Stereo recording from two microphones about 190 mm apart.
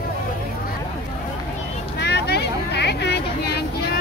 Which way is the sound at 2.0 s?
60° left (ahead or behind).